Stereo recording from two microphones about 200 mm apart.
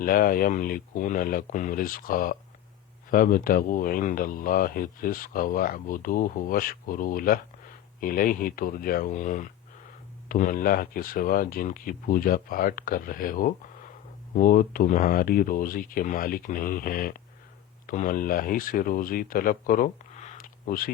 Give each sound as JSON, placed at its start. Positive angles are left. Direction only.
{"t": 0.0, "sound": "speech", "side_deg": 45}